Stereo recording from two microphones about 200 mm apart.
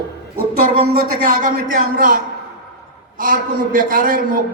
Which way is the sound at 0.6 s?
45° right (ahead or behind).